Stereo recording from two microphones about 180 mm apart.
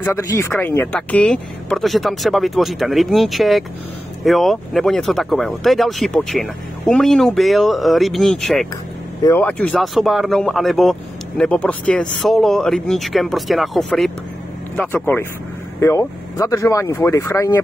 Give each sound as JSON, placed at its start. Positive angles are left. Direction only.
{"t": 0.0, "sound": "speech", "side_deg": 15}
{"t": 9.2, "sound": "speech", "side_deg": 10}